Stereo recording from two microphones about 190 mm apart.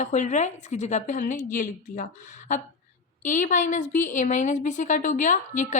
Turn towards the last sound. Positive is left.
turn(degrees=40)  # may be behind; listen again after turning